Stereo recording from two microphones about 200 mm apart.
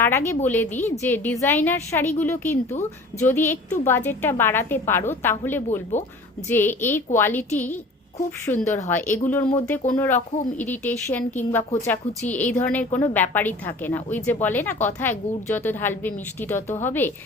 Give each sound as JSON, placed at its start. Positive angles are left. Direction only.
{"t": 0.0, "sound": "a woman's voice", "side_deg": 10}
{"t": 5.9, "sound": "a woman's voice", "side_deg": 35}
{"t": 6.5, "sound": "a woman's voice", "side_deg": 10}
{"t": 8.4, "sound": "a woman's voice", "side_deg": 10}